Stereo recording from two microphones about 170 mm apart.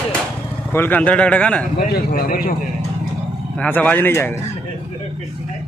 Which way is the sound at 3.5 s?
10° left (ahead or behind).